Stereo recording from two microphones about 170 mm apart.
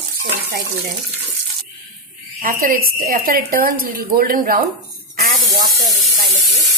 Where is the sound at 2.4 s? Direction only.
55° right (ahead or behind).